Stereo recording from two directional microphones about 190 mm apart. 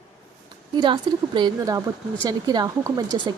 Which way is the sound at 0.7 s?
25° right (ahead or behind).